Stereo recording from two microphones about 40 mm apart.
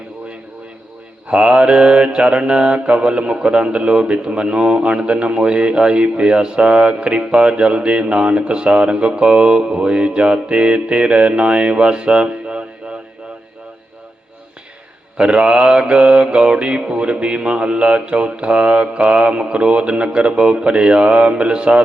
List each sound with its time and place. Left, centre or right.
1.3 s mantra: right
15.2 s mantra: right